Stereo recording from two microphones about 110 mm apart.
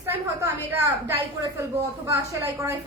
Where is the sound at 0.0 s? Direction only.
25° right (ahead or behind).